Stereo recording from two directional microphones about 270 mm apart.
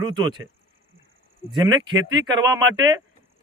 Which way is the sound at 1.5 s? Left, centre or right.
Centre.